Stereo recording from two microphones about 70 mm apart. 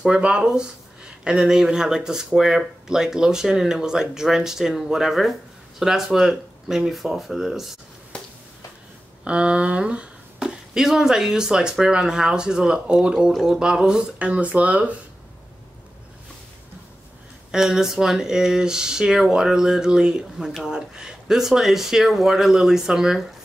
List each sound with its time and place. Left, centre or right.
0.0 s speech: centre
9.2 s speech: centre
17.5 s speech: centre